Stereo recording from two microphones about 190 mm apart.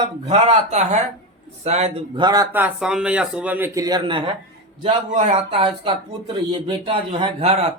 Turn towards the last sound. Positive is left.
turn(degrees=-30)  # may be behind; listen again after turning